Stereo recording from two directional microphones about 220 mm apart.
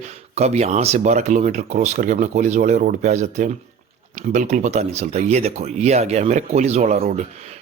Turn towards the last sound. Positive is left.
turn(degrees=-35)  # may be behind; listen again after turning